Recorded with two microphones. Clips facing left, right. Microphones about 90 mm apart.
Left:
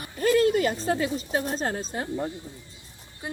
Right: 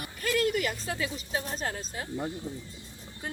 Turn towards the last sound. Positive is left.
turn(degrees=15)  # may be behind; listen again after turning